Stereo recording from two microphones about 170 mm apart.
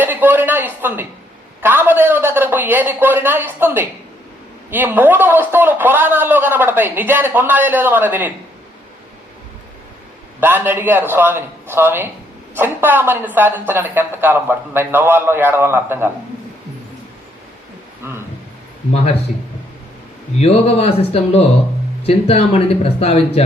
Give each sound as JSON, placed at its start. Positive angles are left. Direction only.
{"t": 0.0, "sound": "a man's voice", "side_deg": -10}
{"t": 10.4, "sound": "a man's voice", "side_deg": -10}
{"t": 18.0, "sound": "speech", "side_deg": -15}
{"t": 20.4, "sound": "speech", "side_deg": 35}